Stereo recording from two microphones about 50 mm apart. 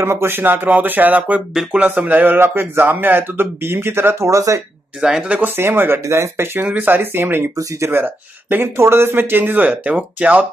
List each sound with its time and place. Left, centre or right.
0.0 s speech: right
0.4 s speech: right
4.3 s speech: right
5.0 s speech: centre
5.6 s speech: right
6.6 s speech: right
7.0 s speech: right
8.7 s speech: right
9.7 s speech: right